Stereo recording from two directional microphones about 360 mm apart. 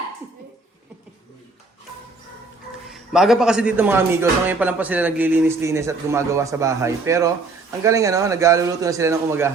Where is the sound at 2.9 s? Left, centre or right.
Centre.